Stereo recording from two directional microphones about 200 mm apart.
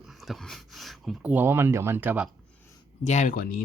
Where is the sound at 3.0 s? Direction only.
40° left (ahead or behind).